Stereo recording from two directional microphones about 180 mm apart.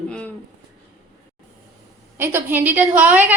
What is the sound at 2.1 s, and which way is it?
A woman's voice, 10° right (ahead or behind).